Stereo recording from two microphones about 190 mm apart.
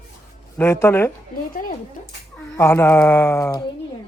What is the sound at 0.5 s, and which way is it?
Speech, 15° left (ahead or behind).